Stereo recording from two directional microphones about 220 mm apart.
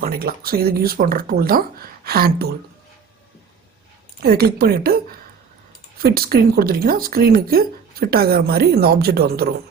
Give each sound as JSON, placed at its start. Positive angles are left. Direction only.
{"t": 0.0, "sound": "speech", "side_deg": -40}
{"t": 4.2, "sound": "a woman's voice", "side_deg": -45}